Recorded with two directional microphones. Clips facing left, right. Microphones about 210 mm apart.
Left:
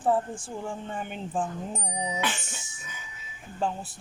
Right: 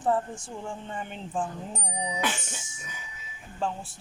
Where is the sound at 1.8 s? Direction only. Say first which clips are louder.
Right 1 dB; 20° left (ahead or behind).